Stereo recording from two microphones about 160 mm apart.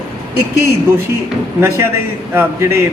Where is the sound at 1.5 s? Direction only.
15° right (ahead or behind).